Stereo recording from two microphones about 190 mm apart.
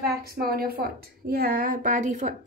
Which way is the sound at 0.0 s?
55° right (ahead or behind).